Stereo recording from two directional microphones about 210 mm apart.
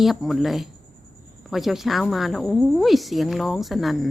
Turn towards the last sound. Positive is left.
turn(degrees=0)  # may be behind; listen again after turning